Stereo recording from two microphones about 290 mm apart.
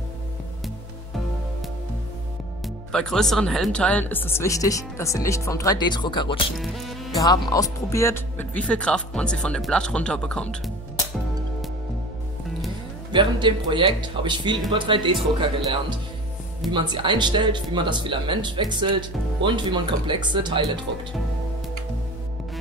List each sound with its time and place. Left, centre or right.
2.9 s speech: centre
6.6 s speech: centre
7.2 s speech: centre
13.1 s speech: centre
16.7 s speech: centre